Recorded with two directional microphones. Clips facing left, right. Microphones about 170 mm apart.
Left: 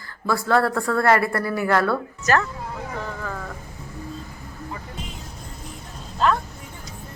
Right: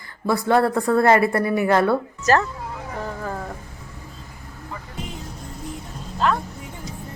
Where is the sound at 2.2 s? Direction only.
30° right (ahead or behind).